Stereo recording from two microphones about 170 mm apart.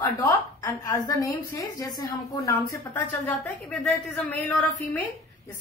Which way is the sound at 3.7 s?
5° left (ahead or behind).